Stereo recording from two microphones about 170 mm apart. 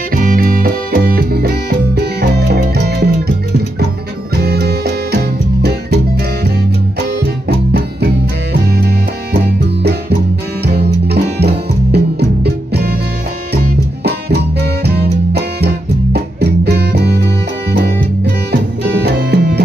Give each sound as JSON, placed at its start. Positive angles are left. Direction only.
{"t": 0.1, "sound": "music", "side_deg": -60}
{"t": 4.4, "sound": "music", "side_deg": -70}
{"t": 8.6, "sound": "music", "side_deg": -70}
{"t": 10.6, "sound": "music", "side_deg": -75}
{"t": 14.0, "sound": "music", "side_deg": -70}
{"t": 19.0, "sound": "music", "side_deg": -70}